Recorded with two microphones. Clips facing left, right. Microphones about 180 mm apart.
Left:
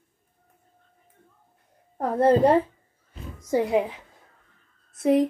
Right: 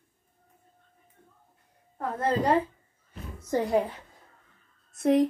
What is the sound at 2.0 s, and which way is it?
Speech, 30° left (ahead or behind).